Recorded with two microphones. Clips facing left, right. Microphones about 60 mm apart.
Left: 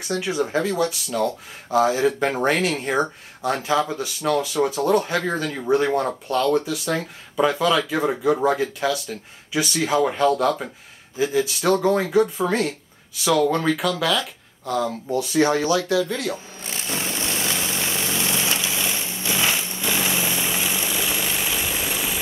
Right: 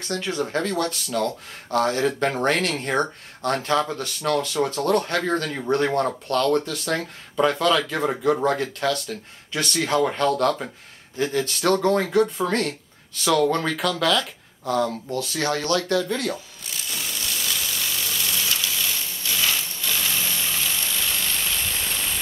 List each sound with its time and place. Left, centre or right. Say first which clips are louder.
0.0 s speech: left 3 dB; centre
15.1 s speech: left 7 dB; centre
16.6 s vehicle: left 5 dB; left; by 22.2 s centre